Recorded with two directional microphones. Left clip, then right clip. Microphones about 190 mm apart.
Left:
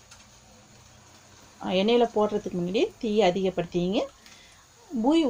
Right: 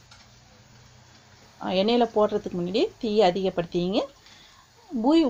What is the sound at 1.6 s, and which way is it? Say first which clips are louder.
Speech: even; 25° right (ahead or behind).